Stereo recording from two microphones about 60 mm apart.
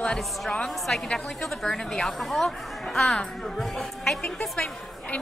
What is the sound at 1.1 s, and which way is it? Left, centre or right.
Speech, centre.